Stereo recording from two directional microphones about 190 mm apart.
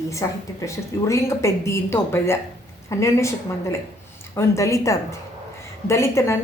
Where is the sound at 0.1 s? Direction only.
15° left (ahead or behind).